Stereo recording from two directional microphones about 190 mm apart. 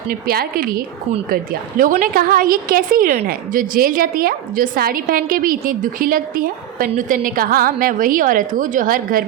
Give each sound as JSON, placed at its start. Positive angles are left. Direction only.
{"t": 0.1, "sound": "a woman's voice", "side_deg": -50}